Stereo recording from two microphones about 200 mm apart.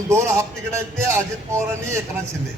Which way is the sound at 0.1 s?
15° right (ahead or behind).